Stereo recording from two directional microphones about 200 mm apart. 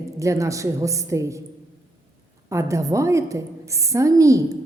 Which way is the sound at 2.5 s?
15° right (ahead or behind).